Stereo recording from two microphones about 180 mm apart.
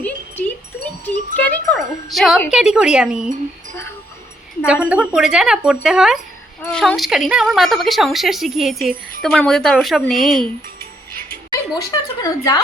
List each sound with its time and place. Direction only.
0.0 s a sound: 10° left (ahead or behind)
2.5 s a woman's voice: 5° right (ahead or behind)
4.6 s a woman's voice: 5° right (ahead or behind)
11.9 s a woman's voice: 20° left (ahead or behind)